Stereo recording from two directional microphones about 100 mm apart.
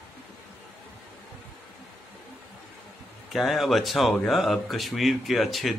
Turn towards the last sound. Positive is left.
turn(degrees=0)  # may be behind; listen again after turning